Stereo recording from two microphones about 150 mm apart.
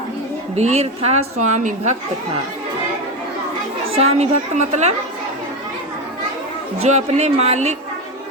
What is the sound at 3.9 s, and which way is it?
Speech, 45° right (ahead or behind).